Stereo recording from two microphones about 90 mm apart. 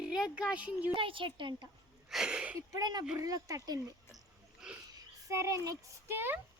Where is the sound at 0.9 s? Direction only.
70° right (ahead or behind).